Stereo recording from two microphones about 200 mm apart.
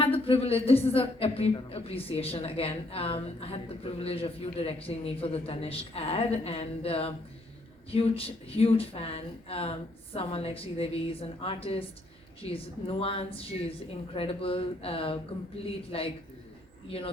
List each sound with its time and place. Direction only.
0.0 s a woman's voice: 25° left (ahead or behind)